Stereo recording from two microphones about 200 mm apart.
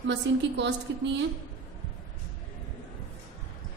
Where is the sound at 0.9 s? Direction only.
65° right (ahead or behind).